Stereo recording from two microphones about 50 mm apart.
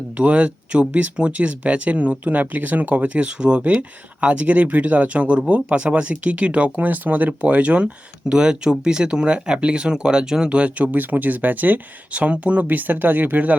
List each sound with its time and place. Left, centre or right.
0.2 s speech: right
10.9 s speech: right